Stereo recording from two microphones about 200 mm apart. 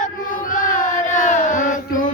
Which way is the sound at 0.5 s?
40° left (ahead or behind).